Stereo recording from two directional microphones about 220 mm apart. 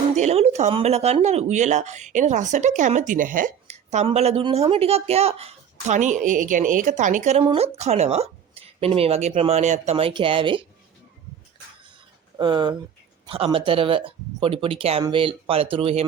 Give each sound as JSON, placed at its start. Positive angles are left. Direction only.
{"t": 0.2, "sound": "speech", "side_deg": -30}
{"t": 12.4, "sound": "speech", "side_deg": -20}